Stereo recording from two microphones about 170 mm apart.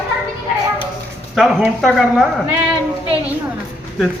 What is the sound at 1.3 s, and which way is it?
Speech, centre (ahead or behind).